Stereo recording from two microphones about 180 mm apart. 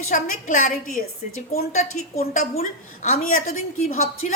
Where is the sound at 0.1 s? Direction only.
45° left (ahead or behind).